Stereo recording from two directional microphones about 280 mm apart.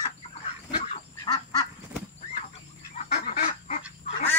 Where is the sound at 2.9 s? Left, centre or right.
Left.